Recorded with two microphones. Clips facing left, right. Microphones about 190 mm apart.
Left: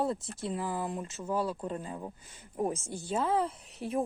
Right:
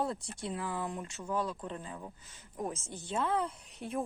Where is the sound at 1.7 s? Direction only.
35° left (ahead or behind).